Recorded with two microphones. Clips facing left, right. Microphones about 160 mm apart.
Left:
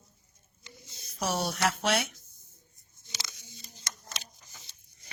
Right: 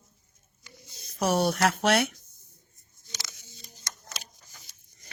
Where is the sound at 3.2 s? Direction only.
20° left (ahead or behind).